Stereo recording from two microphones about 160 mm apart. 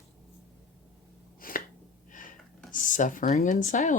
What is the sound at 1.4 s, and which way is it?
Finger snapping, 60° left (ahead or behind).